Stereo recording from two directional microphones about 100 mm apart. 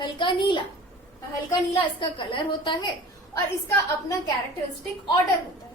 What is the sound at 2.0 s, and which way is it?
Speech, 55° left (ahead or behind).